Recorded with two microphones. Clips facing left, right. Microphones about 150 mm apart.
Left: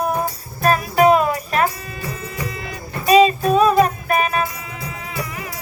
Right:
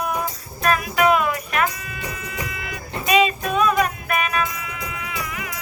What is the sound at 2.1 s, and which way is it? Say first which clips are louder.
Music: left 3 dB; 35° left (ahead or behind).